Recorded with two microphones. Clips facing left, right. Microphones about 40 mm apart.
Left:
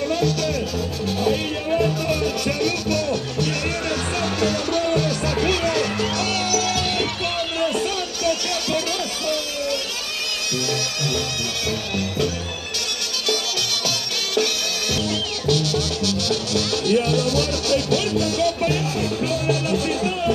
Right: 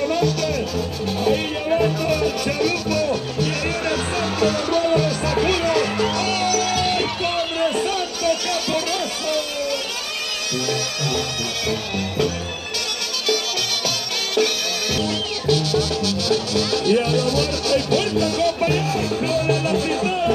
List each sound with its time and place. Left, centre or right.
0.0 s music: centre
13.8 s music: centre
15.4 s music: left
16.3 s music: right